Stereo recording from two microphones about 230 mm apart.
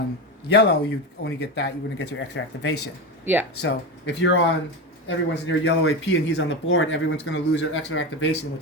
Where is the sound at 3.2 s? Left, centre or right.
Centre.